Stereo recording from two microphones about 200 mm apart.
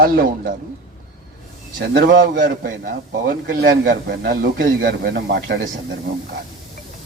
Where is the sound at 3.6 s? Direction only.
60° right (ahead or behind).